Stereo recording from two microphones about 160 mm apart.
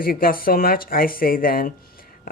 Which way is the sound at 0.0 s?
65° left (ahead or behind).